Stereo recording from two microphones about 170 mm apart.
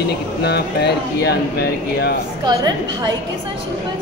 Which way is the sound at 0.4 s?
75° left (ahead or behind).